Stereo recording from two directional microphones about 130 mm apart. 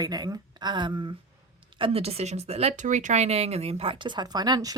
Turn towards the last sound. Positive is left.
turn(degrees=-30)  # may be behind; listen again after turning